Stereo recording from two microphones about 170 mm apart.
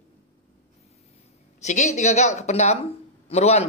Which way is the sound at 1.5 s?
45° left (ahead or behind).